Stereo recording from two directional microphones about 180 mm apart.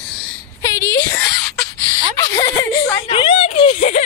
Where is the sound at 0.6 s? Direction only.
15° left (ahead or behind).